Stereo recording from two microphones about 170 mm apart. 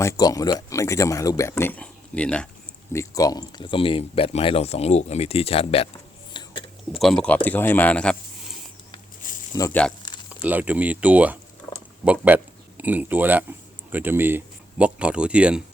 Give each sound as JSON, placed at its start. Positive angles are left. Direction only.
{"t": 0.0, "sound": "speech", "side_deg": 20}
{"t": 2.9, "sound": "speech", "side_deg": 20}
{"t": 6.3, "sound": "whispering", "side_deg": 30}
{"t": 7.0, "sound": "speech", "side_deg": 5}
{"t": 9.5, "sound": "speech", "side_deg": 20}
{"t": 10.2, "sound": "speech", "side_deg": -10}